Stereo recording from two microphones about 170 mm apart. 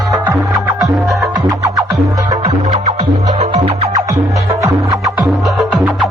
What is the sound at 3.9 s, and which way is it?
Music, 20° right (ahead or behind).